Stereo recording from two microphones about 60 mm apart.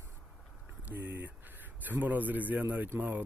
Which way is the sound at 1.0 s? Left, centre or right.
Right.